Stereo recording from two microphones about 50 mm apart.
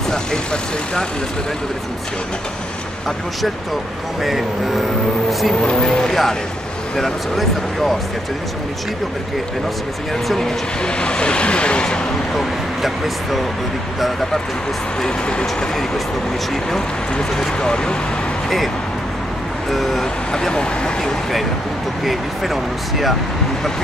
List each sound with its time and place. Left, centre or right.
0.1 s speech: centre
4.2 s speech: centre
10.2 s speech: centre
11.0 s speech: centre
12.4 s speech: centre
15.0 s speech: centre
17.4 s speech: centre
19.7 s speech: centre
20.3 s speech: centre
22.0 s speech: centre